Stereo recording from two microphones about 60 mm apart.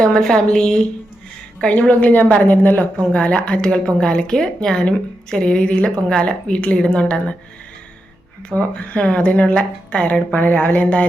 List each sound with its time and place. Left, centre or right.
0.0 s a woman's voice: centre
1.9 s a woman's voice: left
8.5 s speech: right
8.9 s a woman's voice: centre